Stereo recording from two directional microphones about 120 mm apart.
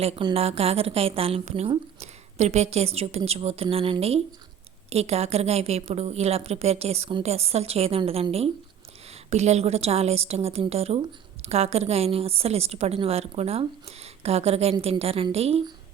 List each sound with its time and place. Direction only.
0.3 s a woman's voice: 55° right (ahead or behind)
9.0 s a woman's voice: 65° right (ahead or behind)